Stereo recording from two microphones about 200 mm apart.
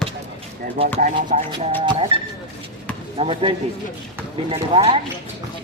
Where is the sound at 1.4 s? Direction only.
25° right (ahead or behind).